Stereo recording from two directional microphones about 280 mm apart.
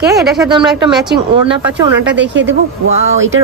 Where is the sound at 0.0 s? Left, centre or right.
Right.